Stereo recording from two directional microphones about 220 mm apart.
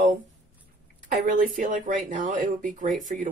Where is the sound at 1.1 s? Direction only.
35° right (ahead or behind).